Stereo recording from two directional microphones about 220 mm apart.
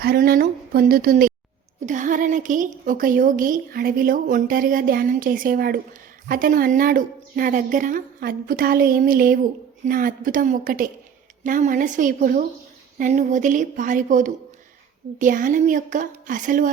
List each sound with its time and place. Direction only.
0.0 s a woman's voice: 45° right (ahead or behind)